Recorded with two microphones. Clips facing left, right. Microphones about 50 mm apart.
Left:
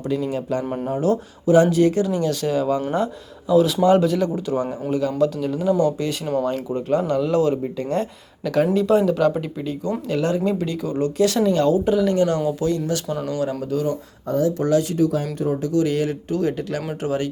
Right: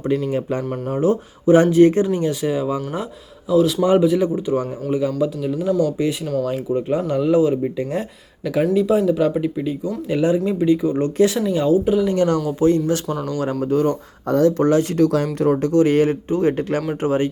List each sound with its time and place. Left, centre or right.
0.0 s speech: right
2.3 s speech: centre
3.5 s speech: centre
3.8 s speech: centre
6.2 s speech: centre
6.5 s speech: centre
12.1 s speech: right
14.3 s speech: right
14.6 s speech: right
14.9 s speech: right
15.4 s speech: right